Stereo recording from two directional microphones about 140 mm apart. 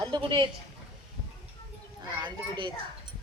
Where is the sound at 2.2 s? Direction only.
35° right (ahead or behind).